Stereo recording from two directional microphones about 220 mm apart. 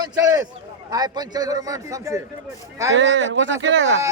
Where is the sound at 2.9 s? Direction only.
60° right (ahead or behind).